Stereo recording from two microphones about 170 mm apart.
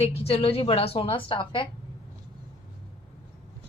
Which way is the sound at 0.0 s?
35° left (ahead or behind).